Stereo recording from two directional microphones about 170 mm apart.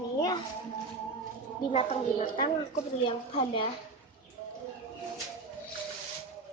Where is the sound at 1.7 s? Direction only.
40° left (ahead or behind).